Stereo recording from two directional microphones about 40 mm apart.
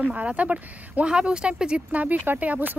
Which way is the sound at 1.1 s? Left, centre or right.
Right.